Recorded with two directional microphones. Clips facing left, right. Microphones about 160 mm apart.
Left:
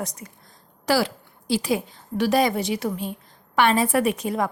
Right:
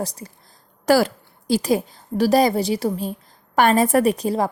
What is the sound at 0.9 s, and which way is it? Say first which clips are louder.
A woman's voice: right 5 dB; 45° right (ahead or behind).